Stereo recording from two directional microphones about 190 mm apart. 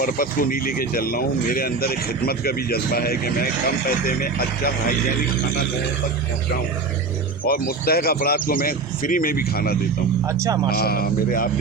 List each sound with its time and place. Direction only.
0.0 s speech: 50° left (ahead or behind)
7.4 s speech: 55° left (ahead or behind)
10.2 s speech: 15° right (ahead or behind)
10.7 s speech: 55° left (ahead or behind)